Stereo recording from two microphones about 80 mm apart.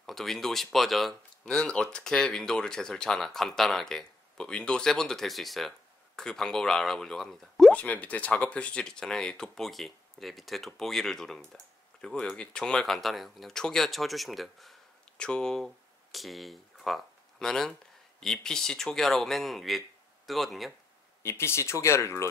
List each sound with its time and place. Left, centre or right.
0.0 s speech: centre
1.5 s speech: centre
7.7 s speech: centre
15.1 s speech: centre
21.2 s speech: left